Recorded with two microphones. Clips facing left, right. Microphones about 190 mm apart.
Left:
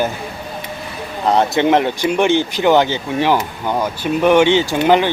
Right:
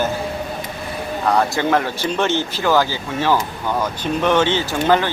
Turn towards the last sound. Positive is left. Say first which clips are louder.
# left 4 dB
turn(degrees=20)  # may be behind; listen again after turning